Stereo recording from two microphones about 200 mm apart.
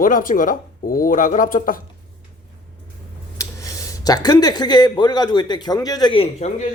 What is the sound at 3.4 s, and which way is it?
Speech, 15° left (ahead or behind).